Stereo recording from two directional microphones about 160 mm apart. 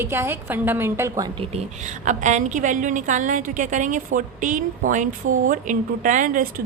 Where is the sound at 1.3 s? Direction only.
40° right (ahead or behind).